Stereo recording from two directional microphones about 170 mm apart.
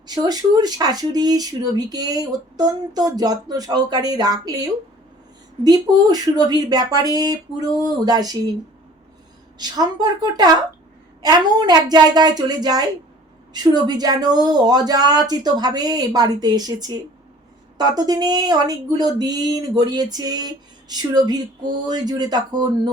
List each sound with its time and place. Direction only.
0.1 s speech: 20° right (ahead or behind)
9.6 s speech: 25° right (ahead or behind)